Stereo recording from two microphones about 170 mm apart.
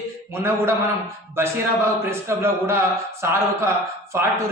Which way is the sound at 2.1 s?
15° right (ahead or behind).